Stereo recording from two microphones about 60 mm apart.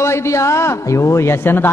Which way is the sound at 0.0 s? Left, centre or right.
Left.